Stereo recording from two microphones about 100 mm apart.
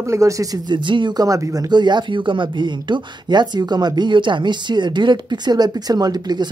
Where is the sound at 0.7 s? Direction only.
50° right (ahead or behind); by 1.7 s 35° right (ahead or behind).